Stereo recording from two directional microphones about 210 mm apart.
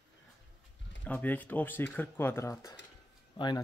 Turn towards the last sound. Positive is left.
turn(degrees=20)  # may be behind; listen again after turning